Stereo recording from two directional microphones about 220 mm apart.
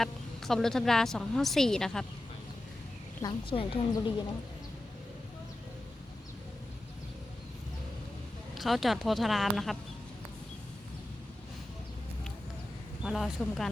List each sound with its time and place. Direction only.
0.0 s a woman's voice: centre (ahead or behind)
3.2 s a woman's voice: 20° left (ahead or behind)
8.5 s a woman's voice: centre (ahead or behind)
13.1 s a woman's voice: centre (ahead or behind)